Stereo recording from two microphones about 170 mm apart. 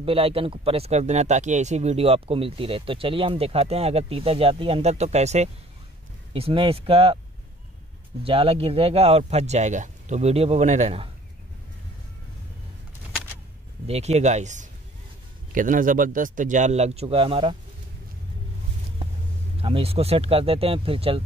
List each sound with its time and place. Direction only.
0.0 s speech: 35° right (ahead or behind)
8.2 s speech: 35° right (ahead or behind)
13.8 s speech: 40° right (ahead or behind)
19.6 s speech: 35° right (ahead or behind)